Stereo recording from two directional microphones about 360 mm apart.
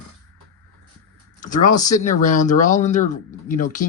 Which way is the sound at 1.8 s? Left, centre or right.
Left.